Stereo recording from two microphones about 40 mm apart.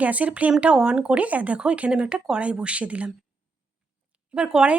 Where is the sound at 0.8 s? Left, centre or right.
Centre.